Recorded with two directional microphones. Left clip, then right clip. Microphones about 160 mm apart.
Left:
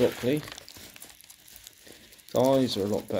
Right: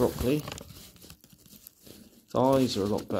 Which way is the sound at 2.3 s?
20° right (ahead or behind).